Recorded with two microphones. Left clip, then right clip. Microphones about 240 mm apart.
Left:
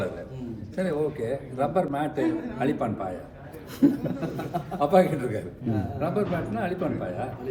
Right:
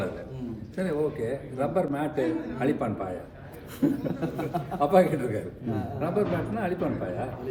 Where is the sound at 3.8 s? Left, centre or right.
Left.